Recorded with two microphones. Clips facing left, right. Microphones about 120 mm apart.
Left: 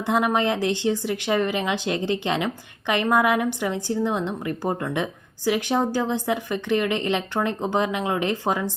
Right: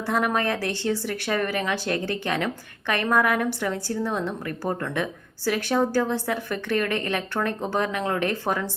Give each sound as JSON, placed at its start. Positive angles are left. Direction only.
{"t": 0.0, "sound": "speech", "side_deg": 15}